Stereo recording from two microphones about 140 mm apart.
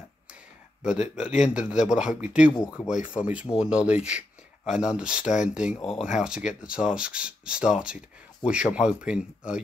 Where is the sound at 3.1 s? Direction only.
10° right (ahead or behind).